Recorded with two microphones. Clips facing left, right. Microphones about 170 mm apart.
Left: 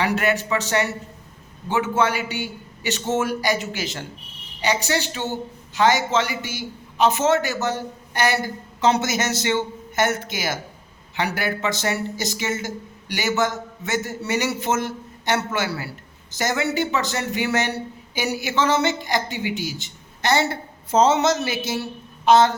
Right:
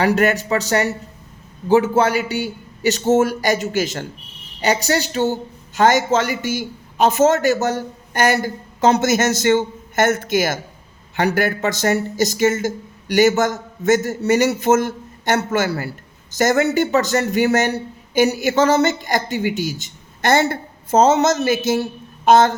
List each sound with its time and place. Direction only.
0.0 s a man's voice: 40° right (ahead or behind)